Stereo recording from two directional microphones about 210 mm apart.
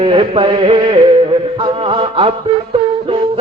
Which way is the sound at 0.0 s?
25° right (ahead or behind).